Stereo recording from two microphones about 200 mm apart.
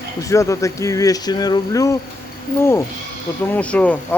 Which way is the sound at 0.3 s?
15° left (ahead or behind).